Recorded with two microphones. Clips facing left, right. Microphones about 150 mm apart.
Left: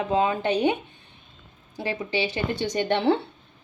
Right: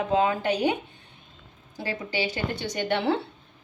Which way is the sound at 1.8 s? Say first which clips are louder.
Left 3 dB; 20° left (ahead or behind).